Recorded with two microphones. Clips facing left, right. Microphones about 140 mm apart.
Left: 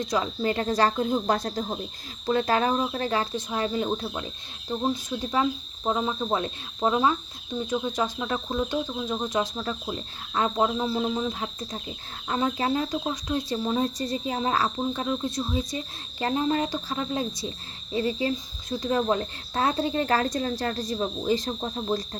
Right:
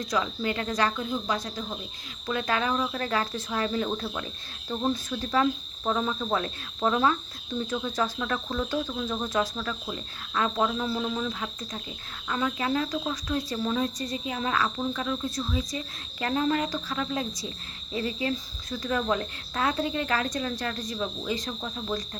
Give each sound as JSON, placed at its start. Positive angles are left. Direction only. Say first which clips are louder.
{"t": 0.0, "sound": "speech", "louder": "left 2 dB", "side_deg": 25}
{"t": 1.3, "sound": "speech", "louder": "left 5 dB", "side_deg": 50}
{"t": 2.2, "sound": "cricket", "louder": "left 5 dB", "side_deg": 35}
{"t": 17.9, "sound": "speech", "louder": "left 3 dB", "side_deg": 30}